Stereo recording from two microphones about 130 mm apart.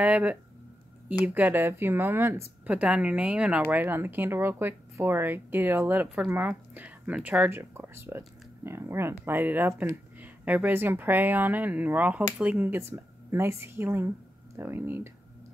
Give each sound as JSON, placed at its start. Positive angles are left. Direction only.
{"t": 0.0, "sound": "speech", "side_deg": -10}